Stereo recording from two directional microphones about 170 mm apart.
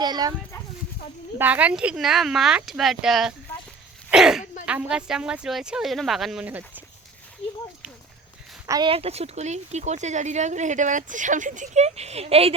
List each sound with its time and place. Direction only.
0.0 s speech: 25° right (ahead or behind)
1.4 s speech: 10° right (ahead or behind)
8.6 s speech: 20° right (ahead or behind)
8.9 s speech: 35° right (ahead or behind)